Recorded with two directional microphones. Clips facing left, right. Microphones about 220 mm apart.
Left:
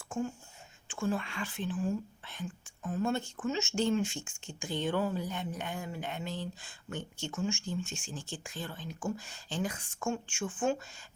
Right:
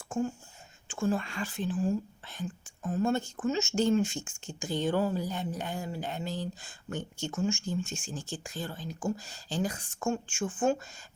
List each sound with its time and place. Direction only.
0.9 s speech: 40° right (ahead or behind)